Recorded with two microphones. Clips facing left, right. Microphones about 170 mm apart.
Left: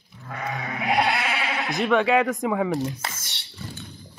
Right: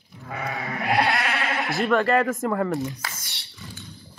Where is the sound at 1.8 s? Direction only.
Centre (ahead or behind).